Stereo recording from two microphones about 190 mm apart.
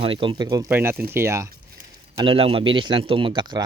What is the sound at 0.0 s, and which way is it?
Speech, 25° right (ahead or behind).